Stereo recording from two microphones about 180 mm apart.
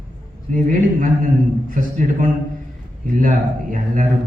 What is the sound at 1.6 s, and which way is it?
Mantra, 50° right (ahead or behind).